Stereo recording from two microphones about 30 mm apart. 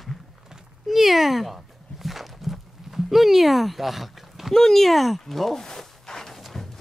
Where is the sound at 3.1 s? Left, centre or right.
Centre.